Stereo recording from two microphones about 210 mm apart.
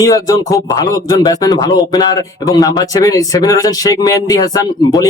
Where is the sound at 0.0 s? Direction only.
15° left (ahead or behind).